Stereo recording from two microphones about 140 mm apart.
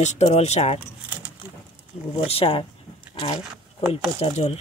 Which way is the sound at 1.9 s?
50° left (ahead or behind).